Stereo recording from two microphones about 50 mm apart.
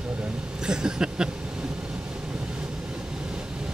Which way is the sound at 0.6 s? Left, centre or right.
Centre.